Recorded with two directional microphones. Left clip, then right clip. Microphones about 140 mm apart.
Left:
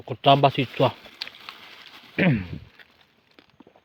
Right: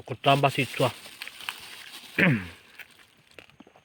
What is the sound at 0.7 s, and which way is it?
Speech, 25° left (ahead or behind).